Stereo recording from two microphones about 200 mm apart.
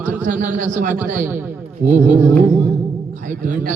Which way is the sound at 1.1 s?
10° right (ahead or behind).